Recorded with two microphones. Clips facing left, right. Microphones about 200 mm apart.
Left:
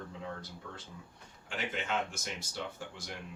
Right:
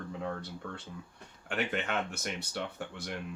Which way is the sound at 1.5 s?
65° right (ahead or behind).